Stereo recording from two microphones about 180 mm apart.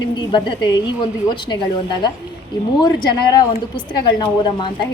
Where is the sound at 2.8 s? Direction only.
20° left (ahead or behind).